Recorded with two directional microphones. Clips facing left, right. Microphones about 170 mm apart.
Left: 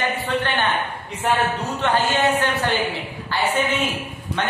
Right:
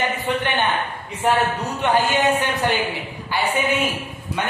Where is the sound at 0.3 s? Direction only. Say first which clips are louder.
Even; 20° right (ahead or behind).